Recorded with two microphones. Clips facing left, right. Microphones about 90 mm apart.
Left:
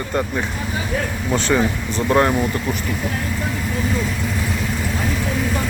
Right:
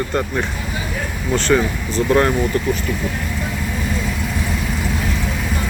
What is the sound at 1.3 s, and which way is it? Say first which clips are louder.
Speech: right 2 dB; 15° left (ahead or behind).